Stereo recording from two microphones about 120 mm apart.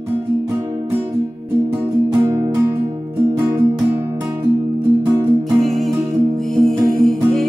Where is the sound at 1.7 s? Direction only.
20° right (ahead or behind).